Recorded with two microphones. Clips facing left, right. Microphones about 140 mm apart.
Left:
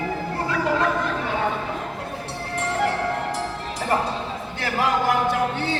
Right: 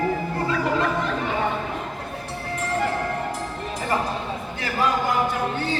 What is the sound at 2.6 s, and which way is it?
Music, 75° left (ahead or behind).